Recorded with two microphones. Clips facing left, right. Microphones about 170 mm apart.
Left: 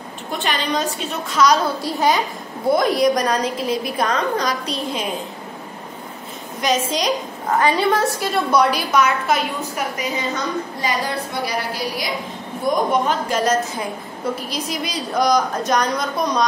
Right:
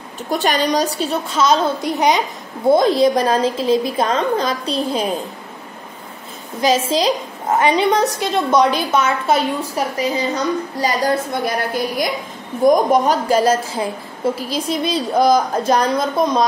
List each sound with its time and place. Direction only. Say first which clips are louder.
0.3 s a woman's voice: right 5 dB; 40° right (ahead or behind)
6.6 s a woman's voice: right 4 dB; 30° right (ahead or behind)